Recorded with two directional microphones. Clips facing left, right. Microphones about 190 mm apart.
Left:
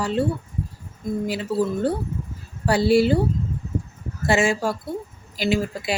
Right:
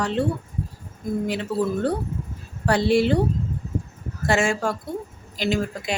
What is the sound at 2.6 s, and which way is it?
Speech, 5° left (ahead or behind).